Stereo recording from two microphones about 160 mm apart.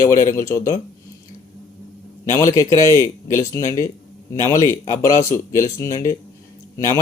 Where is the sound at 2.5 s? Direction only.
20° left (ahead or behind).